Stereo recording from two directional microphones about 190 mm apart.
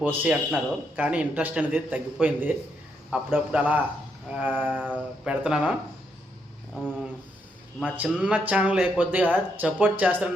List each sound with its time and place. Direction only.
0.0 s speech: 10° right (ahead or behind)
6.7 s a sound: 5° left (ahead or behind)
7.8 s speech: 5° right (ahead or behind)